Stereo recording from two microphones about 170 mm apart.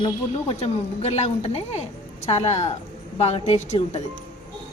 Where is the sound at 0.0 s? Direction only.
35° left (ahead or behind).